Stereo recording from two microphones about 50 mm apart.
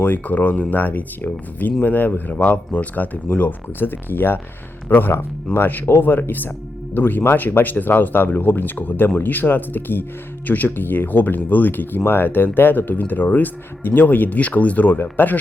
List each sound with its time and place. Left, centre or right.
0.0 s speech: left
2.3 s speech: left